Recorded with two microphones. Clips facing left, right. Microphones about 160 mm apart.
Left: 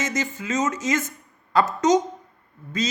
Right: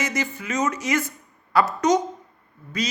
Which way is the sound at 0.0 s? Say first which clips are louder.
Even; 20° left (ahead or behind).